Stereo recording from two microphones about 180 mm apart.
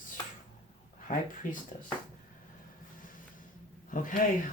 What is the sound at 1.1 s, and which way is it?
Speech, 45° left (ahead or behind).